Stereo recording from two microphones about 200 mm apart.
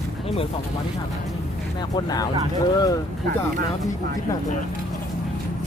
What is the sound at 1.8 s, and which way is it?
Speech, 20° left (ahead or behind).